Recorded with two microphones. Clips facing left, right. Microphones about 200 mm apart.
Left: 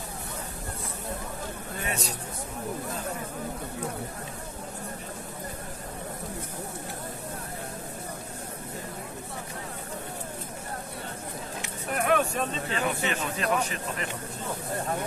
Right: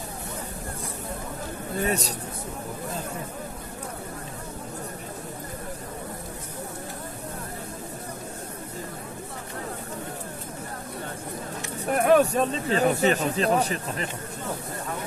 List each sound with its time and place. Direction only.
1.8 s speech: 40° right (ahead or behind)
11.9 s speech: 35° right (ahead or behind)